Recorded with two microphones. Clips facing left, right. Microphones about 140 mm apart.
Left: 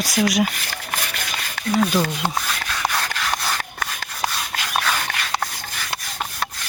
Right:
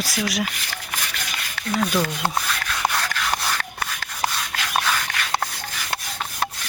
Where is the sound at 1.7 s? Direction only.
5° left (ahead or behind).